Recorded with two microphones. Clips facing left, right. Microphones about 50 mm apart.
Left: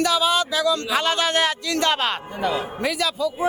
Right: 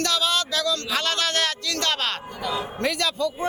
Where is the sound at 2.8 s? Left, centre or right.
Centre.